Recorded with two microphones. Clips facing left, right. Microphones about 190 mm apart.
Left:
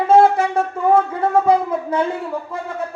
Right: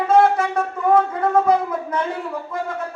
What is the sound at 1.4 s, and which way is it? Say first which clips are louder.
Speech: left 2 dB; 30° left (ahead or behind).